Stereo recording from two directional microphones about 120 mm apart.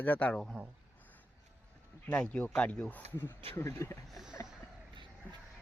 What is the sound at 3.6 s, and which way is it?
Speech, 25° left (ahead or behind).